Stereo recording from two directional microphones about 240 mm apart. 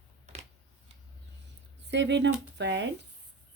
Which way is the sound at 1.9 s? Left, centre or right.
Right.